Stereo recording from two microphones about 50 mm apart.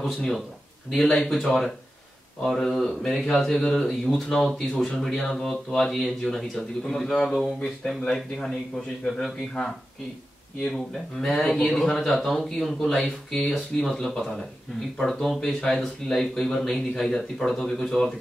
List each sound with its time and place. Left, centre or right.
0.0 s a man's voice: centre
10.7 s a man's voice: centre